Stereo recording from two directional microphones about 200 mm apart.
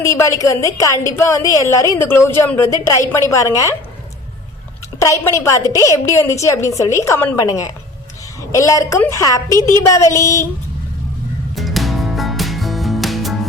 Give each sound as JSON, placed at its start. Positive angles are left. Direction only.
{"t": 0.0, "sound": "a woman's voice", "side_deg": 15}
{"t": 4.9, "sound": "a woman's voice", "side_deg": 15}
{"t": 9.5, "sound": "a woman's voice", "side_deg": -20}
{"t": 9.9, "sound": "a woman's voice", "side_deg": 15}
{"t": 11.5, "sound": "music", "side_deg": 0}